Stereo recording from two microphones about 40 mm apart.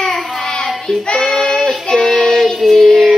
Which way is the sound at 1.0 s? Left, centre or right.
Centre.